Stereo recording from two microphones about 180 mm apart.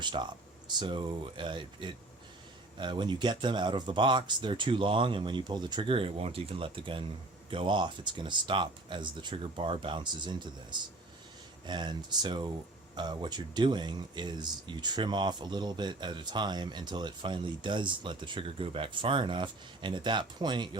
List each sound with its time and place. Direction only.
0.0 s speech: 25° right (ahead or behind)